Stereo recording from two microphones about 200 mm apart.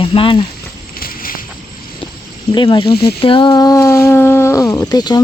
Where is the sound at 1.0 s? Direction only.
45° left (ahead or behind).